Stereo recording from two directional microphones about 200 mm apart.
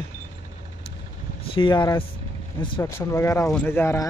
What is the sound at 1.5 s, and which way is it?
Speech, 25° left (ahead or behind).